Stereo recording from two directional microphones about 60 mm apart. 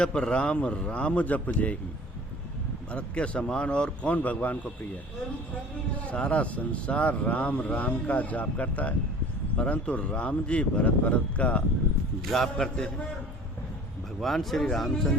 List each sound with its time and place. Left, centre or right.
0.0 s speech: centre
2.9 s speech: centre
6.1 s speech: centre
12.2 s a man's voice: centre
14.2 s speech: centre